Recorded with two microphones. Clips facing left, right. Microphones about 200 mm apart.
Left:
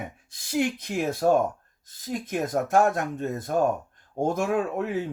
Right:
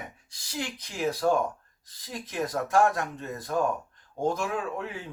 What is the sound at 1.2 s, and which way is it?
Speech, 35° left (ahead or behind).